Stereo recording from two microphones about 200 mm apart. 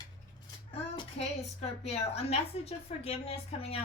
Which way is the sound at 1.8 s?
30° left (ahead or behind).